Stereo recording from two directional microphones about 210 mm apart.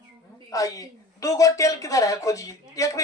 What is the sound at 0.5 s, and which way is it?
A woman's voice, 15° left (ahead or behind).